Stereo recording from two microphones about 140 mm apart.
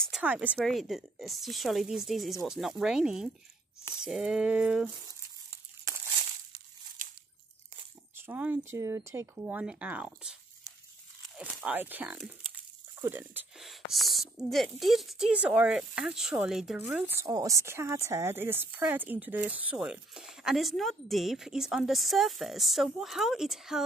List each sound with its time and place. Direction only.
0.2 s speech: 10° right (ahead or behind)
0.6 s speech: centre (ahead or behind)
7.0 s crunch: 70° right (ahead or behind)
8.3 s speech: 15° right (ahead or behind)
11.6 s speech: 15° right (ahead or behind)
13.6 s a sound: centre (ahead or behind)
14.5 s speech: centre (ahead or behind)